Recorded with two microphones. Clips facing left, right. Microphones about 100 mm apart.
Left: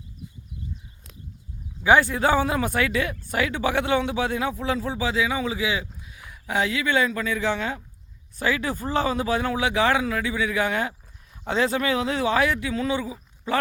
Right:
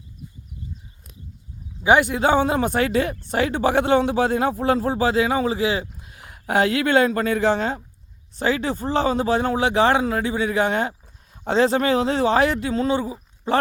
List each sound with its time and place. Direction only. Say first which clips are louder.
1.8 s speech: right 2 dB; 20° right (ahead or behind); by 5.9 s 35° right (ahead or behind)
6.1 s speech: right 5 dB; 55° right (ahead or behind); by 13.1 s 35° right (ahead or behind)